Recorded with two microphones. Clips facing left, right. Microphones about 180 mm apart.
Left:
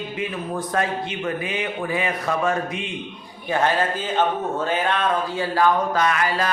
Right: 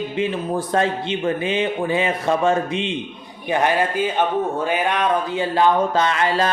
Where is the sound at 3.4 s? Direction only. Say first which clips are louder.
Right 2 dB; 15° right (ahead or behind).